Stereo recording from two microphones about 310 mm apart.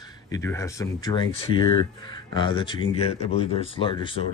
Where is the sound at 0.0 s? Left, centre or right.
Centre.